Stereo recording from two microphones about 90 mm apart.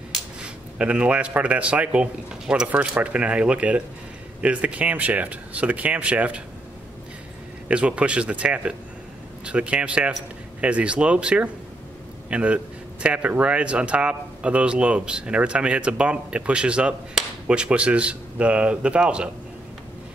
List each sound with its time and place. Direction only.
0.1 s speech: 10° right (ahead or behind)
7.6 s speech: 10° right (ahead or behind)